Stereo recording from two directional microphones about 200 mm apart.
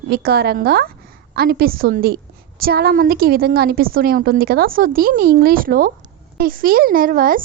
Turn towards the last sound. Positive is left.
turn(degrees=-45)  # may be behind; listen again after turning